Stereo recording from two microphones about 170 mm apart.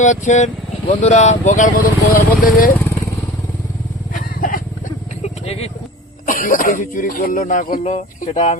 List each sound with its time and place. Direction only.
0.0 s speech: 45° left (ahead or behind)
4.1 s vehicle: 55° left (ahead or behind)
5.2 s a sound: 35° left (ahead or behind)
6.2 s speech: 55° left (ahead or behind)